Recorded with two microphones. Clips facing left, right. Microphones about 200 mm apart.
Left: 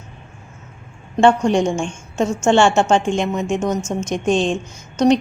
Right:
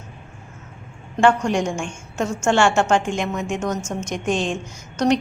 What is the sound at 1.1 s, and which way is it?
A woman's voice, 25° left (ahead or behind).